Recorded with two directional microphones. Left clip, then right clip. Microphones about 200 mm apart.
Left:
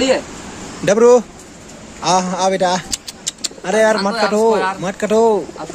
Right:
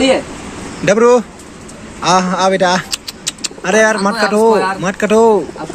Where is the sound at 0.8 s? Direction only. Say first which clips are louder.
Right 1 dB; 20° left (ahead or behind).